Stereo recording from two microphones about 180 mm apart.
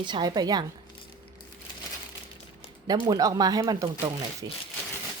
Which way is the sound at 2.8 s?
20° right (ahead or behind).